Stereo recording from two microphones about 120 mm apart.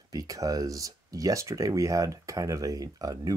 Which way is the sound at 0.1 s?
30° right (ahead or behind).